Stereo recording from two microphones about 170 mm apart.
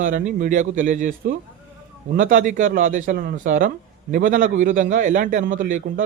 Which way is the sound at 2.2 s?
50° right (ahead or behind).